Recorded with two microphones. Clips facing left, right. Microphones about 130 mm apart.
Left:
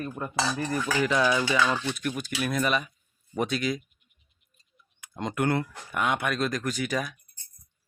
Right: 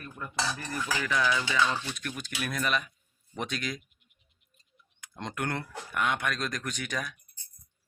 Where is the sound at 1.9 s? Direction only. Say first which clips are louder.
Left 7 dB; 5° left (ahead or behind).